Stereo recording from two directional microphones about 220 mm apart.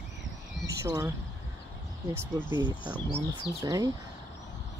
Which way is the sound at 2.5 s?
20° left (ahead or behind).